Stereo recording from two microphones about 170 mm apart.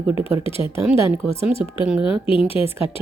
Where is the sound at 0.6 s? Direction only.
15° right (ahead or behind).